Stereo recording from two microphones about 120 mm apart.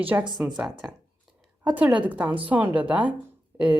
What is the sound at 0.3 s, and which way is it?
A woman's voice, 5° right (ahead or behind).